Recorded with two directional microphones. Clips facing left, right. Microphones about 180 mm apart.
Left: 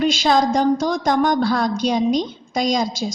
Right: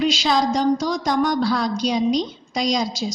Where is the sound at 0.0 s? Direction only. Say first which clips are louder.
Left 2 dB; 50° left (ahead or behind).